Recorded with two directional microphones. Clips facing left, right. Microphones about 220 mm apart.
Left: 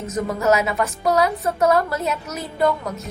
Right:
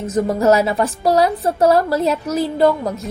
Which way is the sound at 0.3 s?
30° right (ahead or behind).